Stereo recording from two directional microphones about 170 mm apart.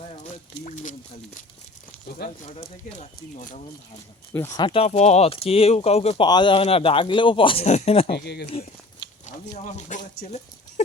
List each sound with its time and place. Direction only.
0.6 s speech: 50° left (ahead or behind)
2.4 s speech: 40° left (ahead or behind)
4.4 s speech: 20° left (ahead or behind); by 6.2 s 35° left (ahead or behind)
6.2 s speech: 25° left (ahead or behind)
8.1 s speech: 75° left (ahead or behind)
9.2 s speech: 45° left (ahead or behind)
10.8 s dog: 45° left (ahead or behind)